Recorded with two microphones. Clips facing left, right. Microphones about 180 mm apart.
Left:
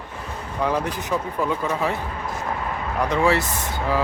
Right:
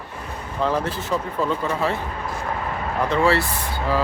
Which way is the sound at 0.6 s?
15° left (ahead or behind).